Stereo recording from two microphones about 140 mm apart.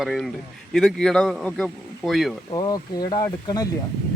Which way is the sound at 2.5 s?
30° left (ahead or behind).